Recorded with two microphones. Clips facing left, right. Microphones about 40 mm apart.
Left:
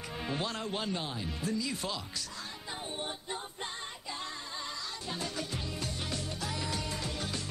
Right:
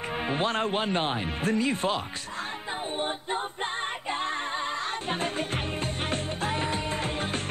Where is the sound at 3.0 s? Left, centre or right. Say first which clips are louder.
Right 9 dB; right.